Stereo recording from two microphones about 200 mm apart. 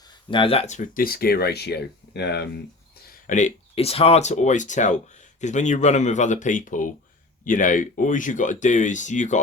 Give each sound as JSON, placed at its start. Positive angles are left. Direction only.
{"t": 0.3, "sound": "speech", "side_deg": 25}
{"t": 3.1, "sound": "speech", "side_deg": 40}